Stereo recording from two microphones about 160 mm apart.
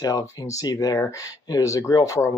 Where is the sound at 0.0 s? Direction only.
20° left (ahead or behind).